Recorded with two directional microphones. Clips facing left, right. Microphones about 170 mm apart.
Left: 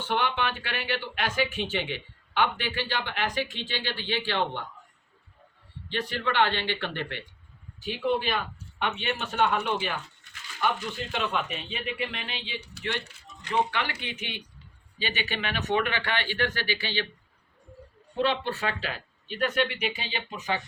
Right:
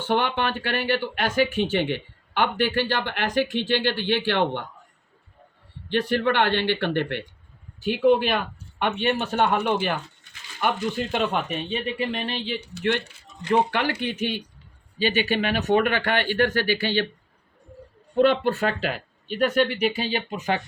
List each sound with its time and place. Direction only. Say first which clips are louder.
0.1 s speech: right 5 dB; 50° right (ahead or behind)
5.9 s speech: right 8 dB; 55° right (ahead or behind)
18.2 s speech: right 8 dB; 50° right (ahead or behind)